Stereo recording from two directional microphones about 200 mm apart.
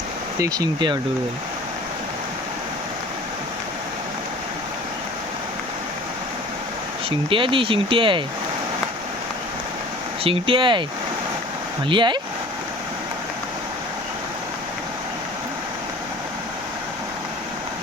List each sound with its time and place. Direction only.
0.3 s speech: 20° right (ahead or behind)
7.3 s speech: 25° right (ahead or behind)
10.2 s speech: 25° right (ahead or behind)
11.9 s speech: 25° right (ahead or behind)